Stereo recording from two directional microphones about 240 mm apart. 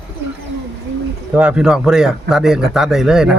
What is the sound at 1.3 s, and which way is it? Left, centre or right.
Speech, centre.